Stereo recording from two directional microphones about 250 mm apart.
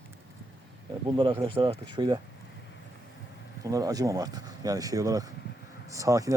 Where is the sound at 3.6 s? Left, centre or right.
Centre.